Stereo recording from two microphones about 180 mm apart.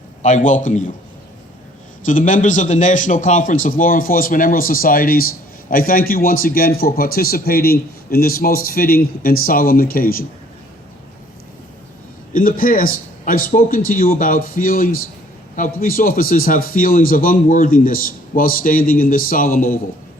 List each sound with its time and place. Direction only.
0.2 s a man's voice: 40° left (ahead or behind)
2.0 s a man's voice: 45° left (ahead or behind)
12.3 s a man's voice: 50° left (ahead or behind)